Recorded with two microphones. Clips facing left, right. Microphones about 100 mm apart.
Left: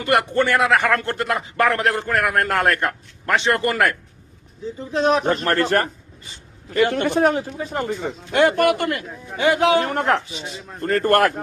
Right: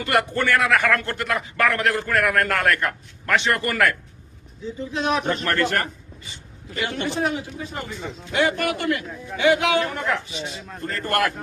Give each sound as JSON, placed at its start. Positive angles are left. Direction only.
{"t": 0.0, "sound": "a man's voice", "side_deg": 25}
{"t": 6.7, "sound": "a man's voice", "side_deg": 50}